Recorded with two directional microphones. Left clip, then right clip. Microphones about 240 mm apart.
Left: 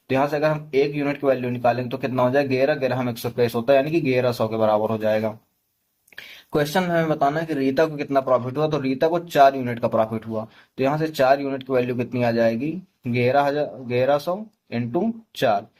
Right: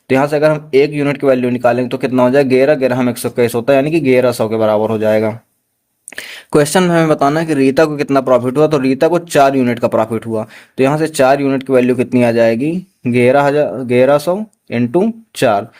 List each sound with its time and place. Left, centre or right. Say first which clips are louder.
0.1 s speech: right 9 dB; right